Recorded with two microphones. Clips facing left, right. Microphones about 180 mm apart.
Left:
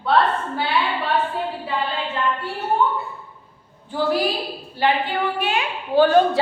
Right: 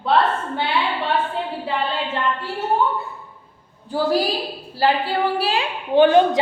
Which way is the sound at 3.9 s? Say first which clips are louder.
Right 1 dB; 35° right (ahead or behind).